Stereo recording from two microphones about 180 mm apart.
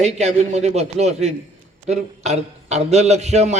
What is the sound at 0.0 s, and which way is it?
A man's voice, 40° right (ahead or behind).